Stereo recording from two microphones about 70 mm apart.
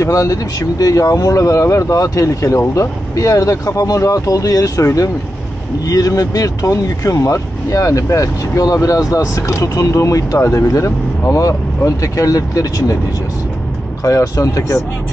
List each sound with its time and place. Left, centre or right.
0.0 s speech: left
5.9 s speech: left
14.0 s speech: left